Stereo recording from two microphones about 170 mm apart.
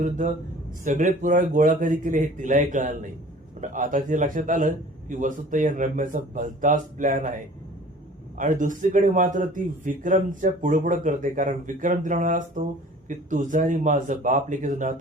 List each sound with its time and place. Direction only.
0.0 s a man's voice: 45° right (ahead or behind)
8.4 s a man's voice: 50° right (ahead or behind)